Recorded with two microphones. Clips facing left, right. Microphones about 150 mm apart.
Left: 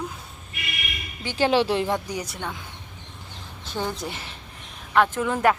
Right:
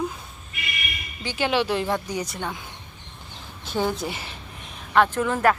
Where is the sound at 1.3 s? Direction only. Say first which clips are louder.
Left 3 dB; 35° left (ahead or behind).